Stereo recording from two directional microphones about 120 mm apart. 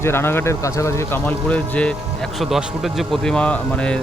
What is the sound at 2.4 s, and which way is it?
Speech, centre (ahead or behind).